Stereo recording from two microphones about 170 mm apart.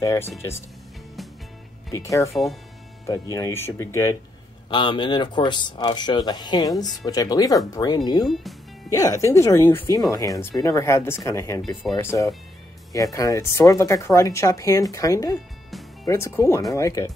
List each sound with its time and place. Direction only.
0.0 s speech: 20° left (ahead or behind)
1.9 s speech: 20° left (ahead or behind)
4.6 s speech: 30° left (ahead or behind)
12.9 s speech: 20° left (ahead or behind)